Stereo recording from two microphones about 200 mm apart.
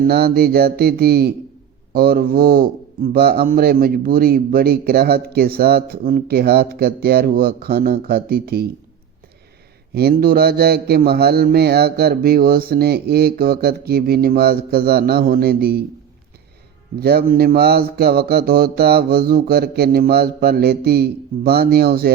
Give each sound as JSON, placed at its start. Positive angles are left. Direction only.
{"t": 0.0, "sound": "speech", "side_deg": -50}
{"t": 9.9, "sound": "speech", "side_deg": -50}
{"t": 17.0, "sound": "speech", "side_deg": -50}